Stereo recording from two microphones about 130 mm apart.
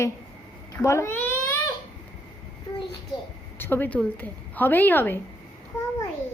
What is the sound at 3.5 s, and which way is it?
A woman's voice, 15° left (ahead or behind).